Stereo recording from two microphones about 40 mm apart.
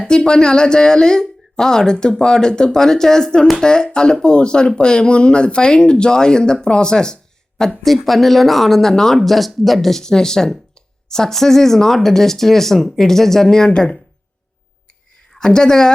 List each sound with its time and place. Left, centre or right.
0.0 s speech: left
7.8 s speech: centre
10.0 s speech: centre
15.4 s speech: centre